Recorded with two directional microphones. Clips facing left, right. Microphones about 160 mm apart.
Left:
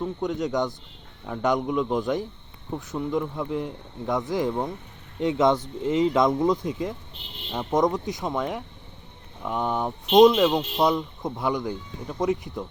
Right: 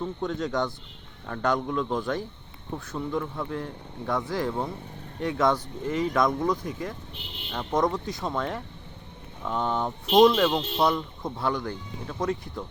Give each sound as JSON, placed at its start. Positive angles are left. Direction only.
{"t": 0.0, "sound": "speech", "side_deg": 15}